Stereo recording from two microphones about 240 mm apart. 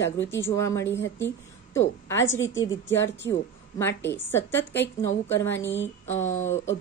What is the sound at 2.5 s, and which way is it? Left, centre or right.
A woman's voice, centre.